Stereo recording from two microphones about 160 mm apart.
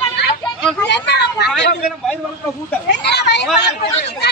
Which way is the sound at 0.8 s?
90° left.